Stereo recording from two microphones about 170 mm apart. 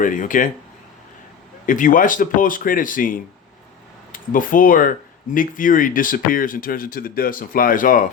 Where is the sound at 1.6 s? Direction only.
50° left (ahead or behind).